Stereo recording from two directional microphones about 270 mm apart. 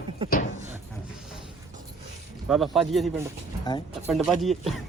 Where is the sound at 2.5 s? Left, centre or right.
Centre.